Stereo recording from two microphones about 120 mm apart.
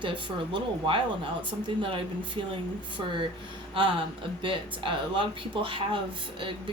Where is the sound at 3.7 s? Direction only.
45° right (ahead or behind).